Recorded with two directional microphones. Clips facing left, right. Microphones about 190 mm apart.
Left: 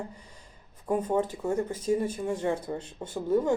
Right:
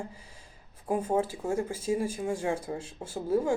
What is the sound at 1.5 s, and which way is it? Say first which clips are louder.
Speech: left 2 dB; 10° right (ahead or behind).